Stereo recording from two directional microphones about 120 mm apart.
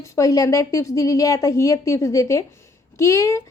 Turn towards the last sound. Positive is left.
turn(degrees=25)  # may be behind; listen again after turning